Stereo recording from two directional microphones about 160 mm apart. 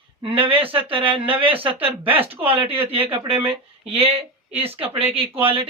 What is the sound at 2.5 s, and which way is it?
Speech, 35° right (ahead or behind).